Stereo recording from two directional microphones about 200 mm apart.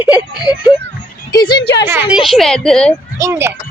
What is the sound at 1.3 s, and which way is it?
Speech, 20° left (ahead or behind).